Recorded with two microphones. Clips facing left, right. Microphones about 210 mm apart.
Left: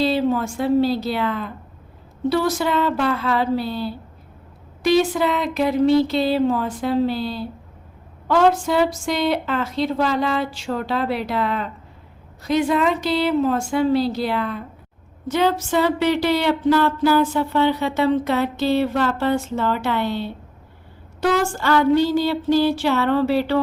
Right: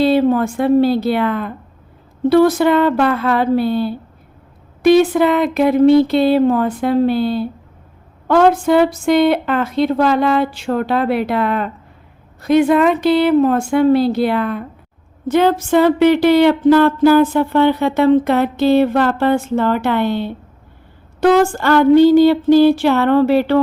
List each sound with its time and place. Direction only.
0.0 s speech: 55° right (ahead or behind)